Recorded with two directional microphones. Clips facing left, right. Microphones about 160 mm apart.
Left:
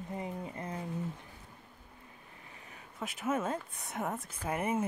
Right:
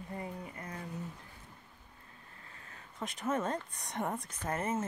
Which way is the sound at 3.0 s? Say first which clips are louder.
Left 1 dB; 5° left (ahead or behind).